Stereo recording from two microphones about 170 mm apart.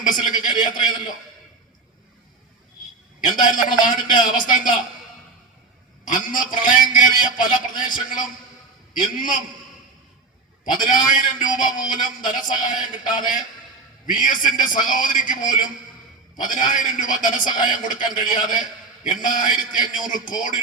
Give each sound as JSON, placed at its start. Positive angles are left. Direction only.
{"t": 0.1, "sound": "a man's voice", "side_deg": 50}
{"t": 3.2, "sound": "a man's voice", "side_deg": 50}
{"t": 6.1, "sound": "a man's voice", "side_deg": 50}
{"t": 10.7, "sound": "a man's voice", "side_deg": 50}